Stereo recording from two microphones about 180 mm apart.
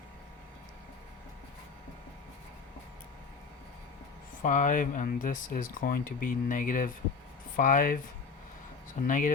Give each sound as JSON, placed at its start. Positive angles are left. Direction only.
{"t": 4.4, "sound": "speech", "side_deg": 45}
{"t": 9.0, "sound": "speech", "side_deg": 45}